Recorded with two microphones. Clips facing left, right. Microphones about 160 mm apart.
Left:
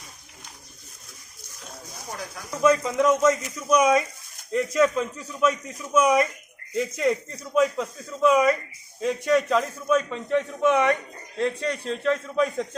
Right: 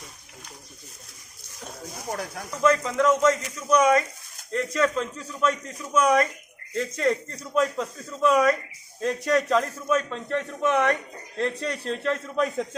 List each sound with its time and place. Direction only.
2.0 s speech: 55° right (ahead or behind)
2.6 s a man's voice: 10° left (ahead or behind)